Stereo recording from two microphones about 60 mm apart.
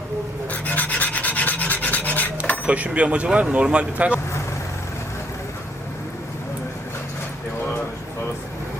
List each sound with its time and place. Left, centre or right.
0.5 s filing: left
2.6 s speech: right